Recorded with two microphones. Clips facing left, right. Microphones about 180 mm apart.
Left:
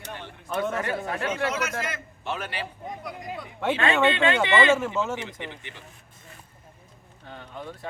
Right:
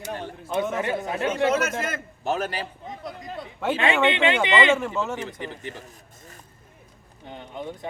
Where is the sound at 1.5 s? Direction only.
50° right (ahead or behind).